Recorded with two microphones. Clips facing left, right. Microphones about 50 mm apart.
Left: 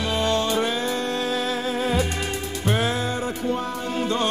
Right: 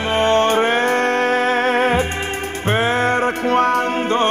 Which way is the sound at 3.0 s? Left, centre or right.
Right.